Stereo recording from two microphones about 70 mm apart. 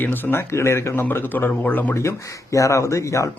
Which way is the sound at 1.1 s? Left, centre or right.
Left.